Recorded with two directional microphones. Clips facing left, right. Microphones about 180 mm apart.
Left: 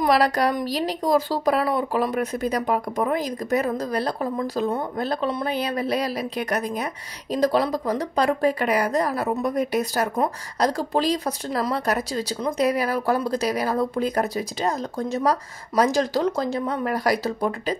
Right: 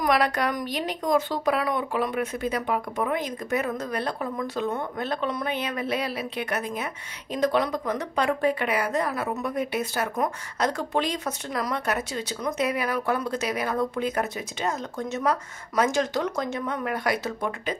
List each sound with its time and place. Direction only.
0.0 s speech: 35° left (ahead or behind)